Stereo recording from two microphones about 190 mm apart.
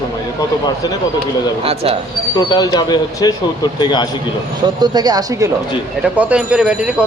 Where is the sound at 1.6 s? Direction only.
30° right (ahead or behind).